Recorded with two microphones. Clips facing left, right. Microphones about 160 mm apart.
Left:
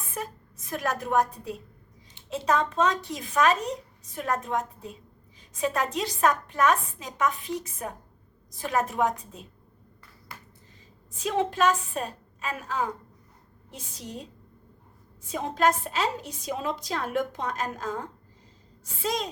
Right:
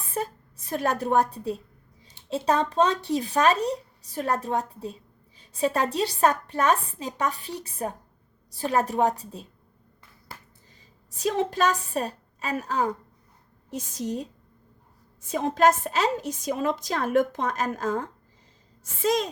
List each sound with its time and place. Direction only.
0.1 s a woman's voice: 30° right (ahead or behind)
11.1 s a woman's voice: 40° right (ahead or behind)